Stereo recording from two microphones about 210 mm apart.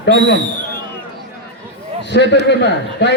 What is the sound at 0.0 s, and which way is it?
Speech, 55° left (ahead or behind).